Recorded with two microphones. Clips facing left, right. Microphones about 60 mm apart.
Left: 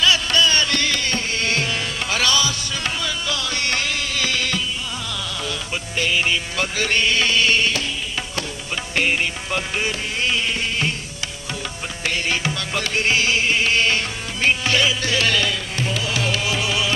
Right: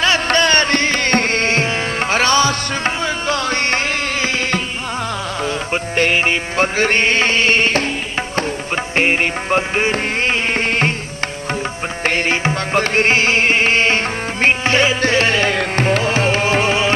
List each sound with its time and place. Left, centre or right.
0.0 s music: right
1.5 s music: right
12.0 s music: right